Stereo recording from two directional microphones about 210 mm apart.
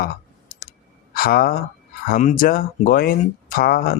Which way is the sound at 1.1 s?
45° left (ahead or behind).